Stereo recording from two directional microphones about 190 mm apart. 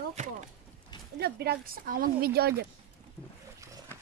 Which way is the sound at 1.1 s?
55° right (ahead or behind).